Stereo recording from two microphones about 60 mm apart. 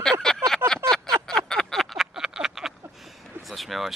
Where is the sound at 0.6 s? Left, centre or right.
Right.